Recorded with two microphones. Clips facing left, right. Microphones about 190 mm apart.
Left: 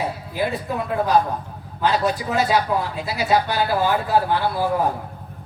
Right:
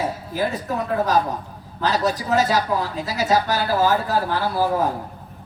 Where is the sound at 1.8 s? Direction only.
40° right (ahead or behind).